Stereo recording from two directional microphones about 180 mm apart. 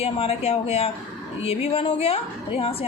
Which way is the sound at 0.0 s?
35° left (ahead or behind).